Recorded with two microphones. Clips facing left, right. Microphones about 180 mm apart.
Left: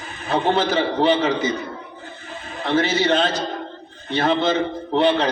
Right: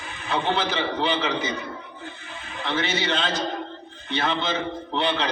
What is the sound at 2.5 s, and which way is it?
A man's voice, 40° left (ahead or behind).